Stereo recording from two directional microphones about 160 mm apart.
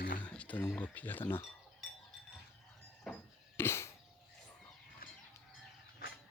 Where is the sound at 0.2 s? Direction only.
10° left (ahead or behind).